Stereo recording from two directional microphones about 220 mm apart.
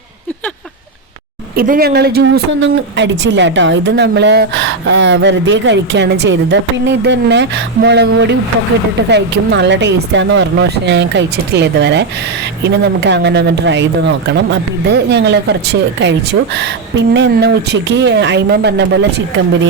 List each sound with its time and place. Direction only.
1.5 s speech: 40° right (ahead or behind)